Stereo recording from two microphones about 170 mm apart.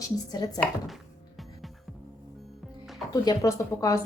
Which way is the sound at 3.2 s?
20° left (ahead or behind).